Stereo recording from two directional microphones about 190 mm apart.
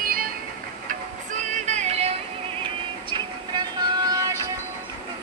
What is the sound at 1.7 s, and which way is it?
Music, 35° right (ahead or behind).